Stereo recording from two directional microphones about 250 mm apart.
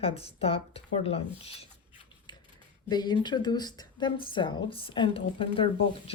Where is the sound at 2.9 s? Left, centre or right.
Centre.